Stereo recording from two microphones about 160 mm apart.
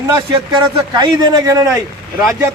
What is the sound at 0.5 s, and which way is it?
Speech, 25° right (ahead or behind).